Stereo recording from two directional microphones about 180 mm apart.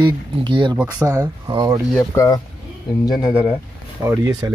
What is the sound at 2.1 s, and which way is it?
Speech, 15° left (ahead or behind).